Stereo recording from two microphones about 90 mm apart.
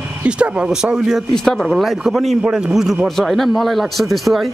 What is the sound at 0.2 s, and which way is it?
Speech, 10° right (ahead or behind).